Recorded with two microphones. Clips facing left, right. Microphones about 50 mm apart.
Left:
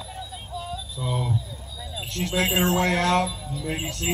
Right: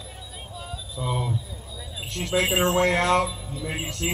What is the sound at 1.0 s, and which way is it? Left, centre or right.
Speech, centre.